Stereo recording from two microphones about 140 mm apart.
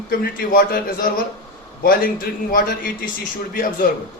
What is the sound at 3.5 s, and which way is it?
Speech, 90° left.